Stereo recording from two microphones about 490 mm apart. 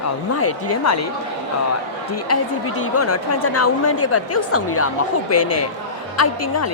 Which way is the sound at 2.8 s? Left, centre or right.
Left.